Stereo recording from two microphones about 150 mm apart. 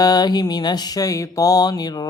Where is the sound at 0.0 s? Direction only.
25° left (ahead or behind).